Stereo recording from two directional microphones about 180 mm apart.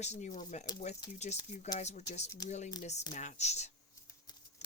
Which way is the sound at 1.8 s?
40° left (ahead or behind).